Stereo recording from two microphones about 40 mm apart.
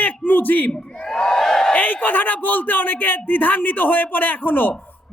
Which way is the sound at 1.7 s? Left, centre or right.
Left.